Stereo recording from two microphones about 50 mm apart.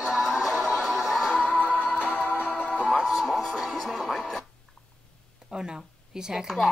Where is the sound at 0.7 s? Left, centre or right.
Centre.